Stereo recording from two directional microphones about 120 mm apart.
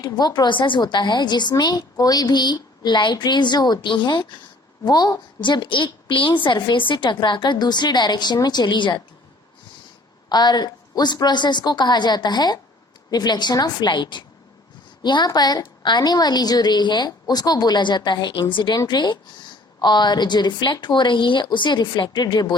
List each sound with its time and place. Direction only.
0.0 s a woman's voice: 35° left (ahead or behind)
10.2 s a woman's voice: 35° left (ahead or behind)